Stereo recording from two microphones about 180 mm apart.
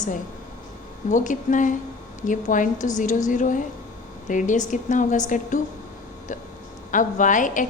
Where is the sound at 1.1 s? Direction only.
45° left (ahead or behind).